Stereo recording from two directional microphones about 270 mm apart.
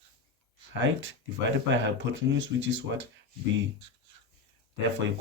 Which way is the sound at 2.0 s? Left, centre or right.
Right.